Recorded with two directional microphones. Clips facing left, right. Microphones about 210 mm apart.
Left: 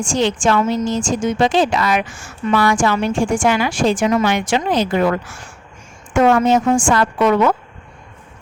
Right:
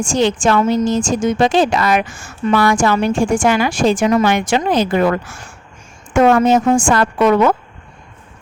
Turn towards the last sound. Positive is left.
turn(degrees=-45)  # may be behind; listen again after turning